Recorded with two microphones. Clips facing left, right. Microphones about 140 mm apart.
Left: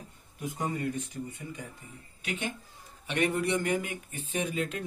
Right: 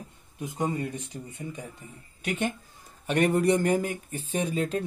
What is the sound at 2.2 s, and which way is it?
Speech, 50° right (ahead or behind).